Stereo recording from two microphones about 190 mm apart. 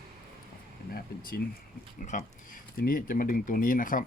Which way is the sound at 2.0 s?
45° left (ahead or behind).